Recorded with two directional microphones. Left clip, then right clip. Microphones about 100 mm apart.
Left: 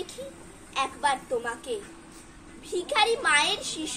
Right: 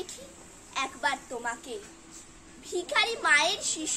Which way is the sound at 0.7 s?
40° right (ahead or behind).